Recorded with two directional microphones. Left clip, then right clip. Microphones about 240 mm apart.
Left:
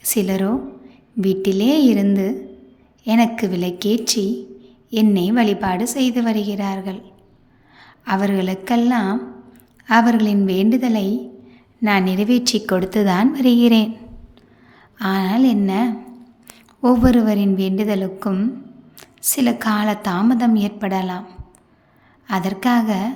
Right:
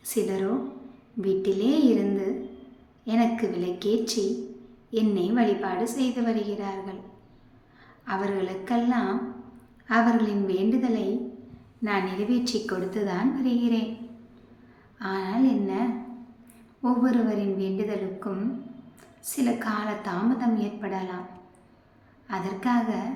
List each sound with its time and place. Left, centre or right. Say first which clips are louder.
0.0 s a woman's voice: left 6 dB; left
14.9 s a woman's voice: left 8 dB; left
22.3 s a woman's voice: left 8 dB; left